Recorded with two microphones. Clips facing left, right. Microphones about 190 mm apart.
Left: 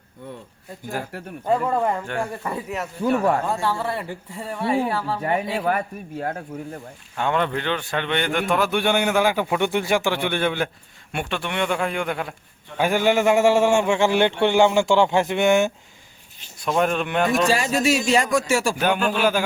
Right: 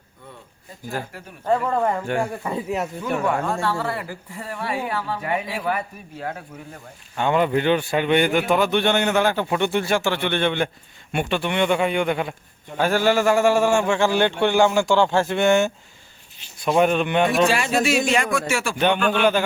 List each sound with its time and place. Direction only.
1.1 s speech: 65° left (ahead or behind)
1.5 s speech: 10° left (ahead or behind)
2.0 s speech: 10° right (ahead or behind)
3.0 s speech: 35° left (ahead or behind)
3.6 s a man's voice: 15° left (ahead or behind); by 6.3 s 45° left (ahead or behind)
7.2 s a man's voice: 5° right (ahead or behind)
12.7 s a man's voice: 15° left (ahead or behind)
16.6 s a man's voice: 5° right (ahead or behind)
17.5 s speech: 40° left (ahead or behind)
18.8 s a man's voice: 5° left (ahead or behind)